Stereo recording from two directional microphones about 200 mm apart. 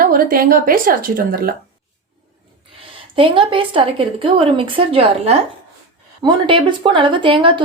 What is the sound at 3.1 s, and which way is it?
A woman's voice, 25° right (ahead or behind).